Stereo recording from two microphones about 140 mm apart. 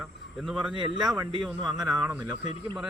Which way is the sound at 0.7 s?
35° right (ahead or behind).